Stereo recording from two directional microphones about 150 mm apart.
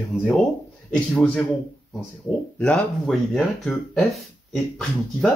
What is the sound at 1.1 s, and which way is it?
Speech, 10° left (ahead or behind).